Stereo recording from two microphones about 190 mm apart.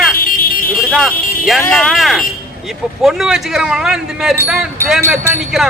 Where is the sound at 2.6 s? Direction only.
Centre (ahead or behind).